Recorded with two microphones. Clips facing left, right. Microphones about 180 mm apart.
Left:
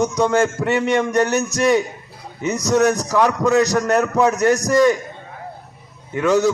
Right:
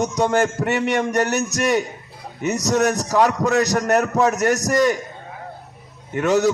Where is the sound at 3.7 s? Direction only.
20° right (ahead or behind).